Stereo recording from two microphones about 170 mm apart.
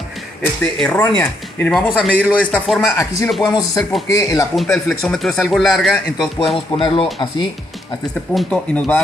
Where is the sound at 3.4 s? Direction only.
25° left (ahead or behind).